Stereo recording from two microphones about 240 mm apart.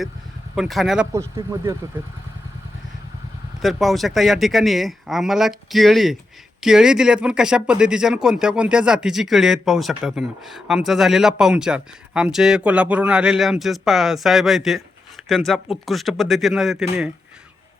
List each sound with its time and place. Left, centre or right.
0.5 s speech: centre
1.4 s speech: centre
3.6 s speech: centre